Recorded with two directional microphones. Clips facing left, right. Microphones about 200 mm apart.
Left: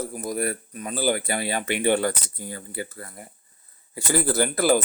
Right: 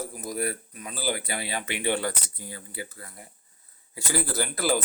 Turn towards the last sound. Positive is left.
turn(degrees=50)  # may be behind; listen again after turning